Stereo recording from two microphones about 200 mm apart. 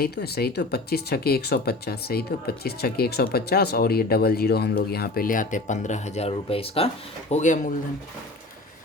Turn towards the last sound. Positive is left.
turn(degrees=40)  # may be behind; listen again after turning